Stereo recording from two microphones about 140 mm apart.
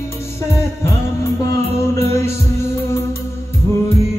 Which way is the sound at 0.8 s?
20° left (ahead or behind).